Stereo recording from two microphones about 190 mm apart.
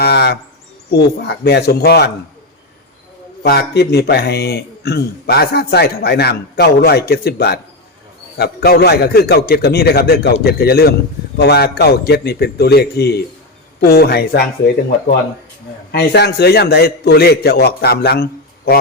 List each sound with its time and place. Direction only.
0.0 s a sound: 60° left (ahead or behind)
0.9 s a man's voice: 60° left (ahead or behind)
3.4 s a man's voice: 60° left (ahead or behind)
15.9 s a man's voice: 60° left (ahead or behind)